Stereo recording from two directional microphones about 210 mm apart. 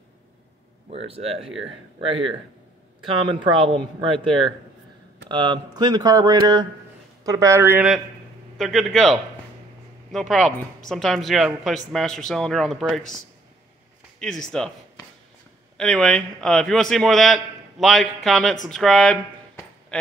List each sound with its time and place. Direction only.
0.8 s a man's voice: 30° right (ahead or behind); by 13.1 s centre (ahead or behind)
14.2 s a man's voice: 5° left (ahead or behind)
15.8 s a man's voice: centre (ahead or behind)